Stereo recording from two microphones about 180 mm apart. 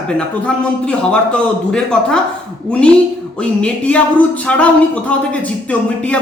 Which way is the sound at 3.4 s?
5° left (ahead or behind).